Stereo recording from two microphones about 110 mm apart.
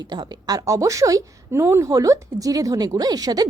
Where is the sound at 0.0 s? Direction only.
40° right (ahead or behind).